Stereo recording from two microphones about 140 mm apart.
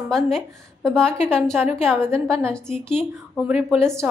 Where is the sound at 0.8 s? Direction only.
5° left (ahead or behind).